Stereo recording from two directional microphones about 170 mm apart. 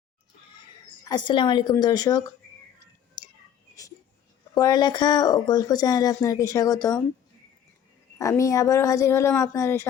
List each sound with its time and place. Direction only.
1.0 s speech: 25° left (ahead or behind)
4.5 s speech: 25° left (ahead or behind)
8.2 s speech: 20° left (ahead or behind)